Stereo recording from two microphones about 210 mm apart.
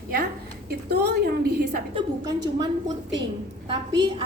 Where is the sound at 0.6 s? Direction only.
50° right (ahead or behind).